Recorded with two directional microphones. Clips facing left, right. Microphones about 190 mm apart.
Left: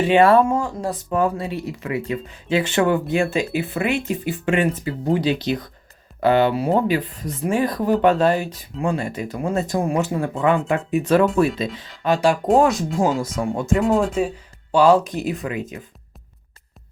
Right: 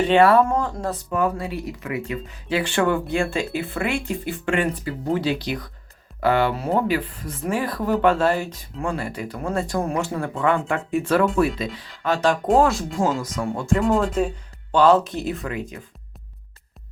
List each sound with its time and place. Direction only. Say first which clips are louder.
0.1 s speech: left 2 dB; 25° left (ahead or behind)
0.4 s speech: left 2 dB; 10° left (ahead or behind)
1.1 s speech: left 3 dB; 25° left (ahead or behind)
12.9 s speech: left 3 dB; centre (ahead or behind); by 15.8 s 20° left (ahead or behind)